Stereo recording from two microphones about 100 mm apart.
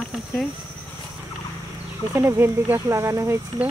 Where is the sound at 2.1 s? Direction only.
25° right (ahead or behind).